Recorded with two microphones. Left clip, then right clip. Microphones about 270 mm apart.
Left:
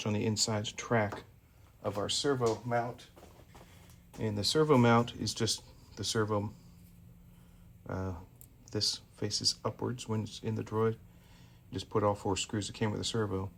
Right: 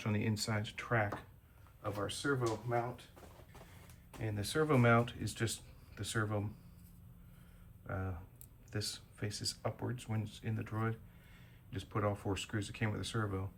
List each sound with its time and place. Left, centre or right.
0.0 s speech: centre
4.2 s speech: centre
7.9 s speech: centre